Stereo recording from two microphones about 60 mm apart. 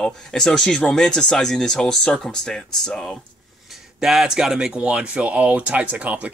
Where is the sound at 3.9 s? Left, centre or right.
Centre; by 6.3 s right.